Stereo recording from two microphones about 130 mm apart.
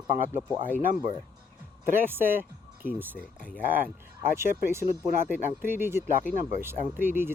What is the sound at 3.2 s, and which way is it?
Speech, 10° left (ahead or behind).